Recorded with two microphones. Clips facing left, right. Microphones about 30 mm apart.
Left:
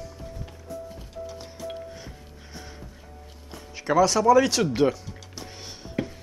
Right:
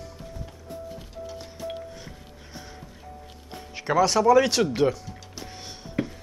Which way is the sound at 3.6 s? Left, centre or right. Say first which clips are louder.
Left 1 dB; centre.